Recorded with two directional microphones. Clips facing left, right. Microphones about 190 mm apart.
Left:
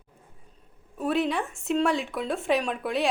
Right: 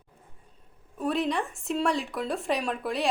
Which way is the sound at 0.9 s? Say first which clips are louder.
Left 1 dB; centre (ahead or behind).